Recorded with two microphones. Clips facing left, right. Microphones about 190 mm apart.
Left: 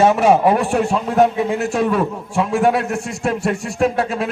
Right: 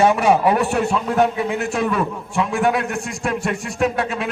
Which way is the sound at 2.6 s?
30° left (ahead or behind).